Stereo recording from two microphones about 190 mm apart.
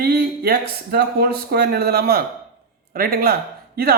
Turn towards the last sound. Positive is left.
turn(degrees=-55)  # may be behind; listen again after turning